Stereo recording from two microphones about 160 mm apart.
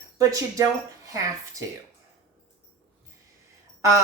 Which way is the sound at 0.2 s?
20° right (ahead or behind).